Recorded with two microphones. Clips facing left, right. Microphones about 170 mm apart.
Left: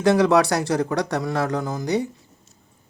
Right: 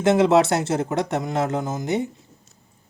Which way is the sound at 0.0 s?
25° right (ahead or behind).